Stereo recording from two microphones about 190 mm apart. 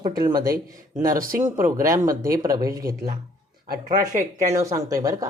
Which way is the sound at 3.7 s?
45° right (ahead or behind).